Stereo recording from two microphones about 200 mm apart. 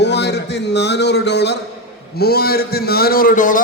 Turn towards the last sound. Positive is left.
turn(degrees=40)  # may be behind; listen again after turning